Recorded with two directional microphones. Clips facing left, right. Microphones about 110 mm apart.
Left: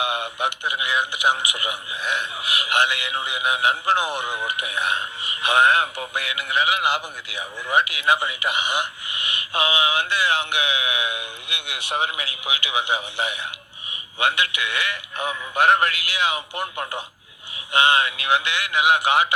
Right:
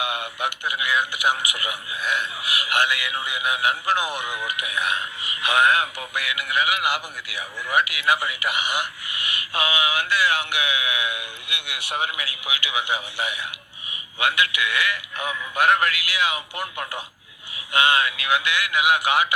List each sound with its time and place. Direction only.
0.0 s a man's voice: 25° left (ahead or behind)